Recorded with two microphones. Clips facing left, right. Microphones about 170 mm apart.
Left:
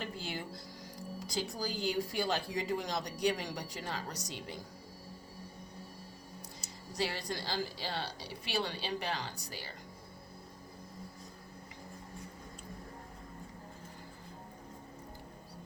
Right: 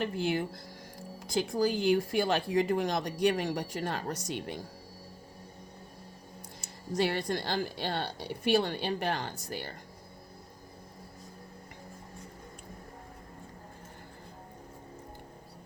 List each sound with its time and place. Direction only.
0.0 s speech: 55° right (ahead or behind)
6.6 s speech: 55° right (ahead or behind)